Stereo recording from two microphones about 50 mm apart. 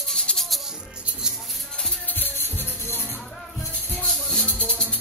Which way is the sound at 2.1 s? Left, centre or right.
Left.